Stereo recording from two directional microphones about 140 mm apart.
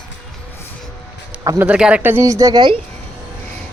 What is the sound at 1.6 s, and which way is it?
Speech, 10° right (ahead or behind).